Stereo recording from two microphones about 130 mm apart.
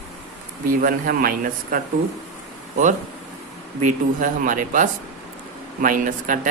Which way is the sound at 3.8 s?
90° right.